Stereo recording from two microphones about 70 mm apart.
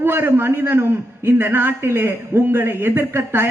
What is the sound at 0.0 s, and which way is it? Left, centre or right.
A man's voice, right.